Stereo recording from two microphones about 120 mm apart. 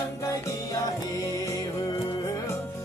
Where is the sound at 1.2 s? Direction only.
25° left (ahead or behind).